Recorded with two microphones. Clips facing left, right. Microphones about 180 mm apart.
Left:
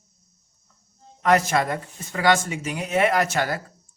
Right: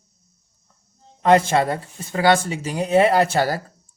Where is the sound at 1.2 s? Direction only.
30° right (ahead or behind).